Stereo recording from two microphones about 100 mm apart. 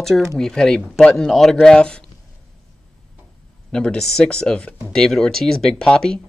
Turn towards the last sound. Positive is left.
turn(degrees=5)  # may be behind; listen again after turning